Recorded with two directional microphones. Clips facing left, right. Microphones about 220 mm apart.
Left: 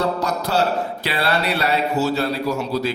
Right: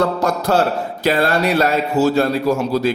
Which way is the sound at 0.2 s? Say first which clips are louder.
Right 4 dB; 50° right (ahead or behind).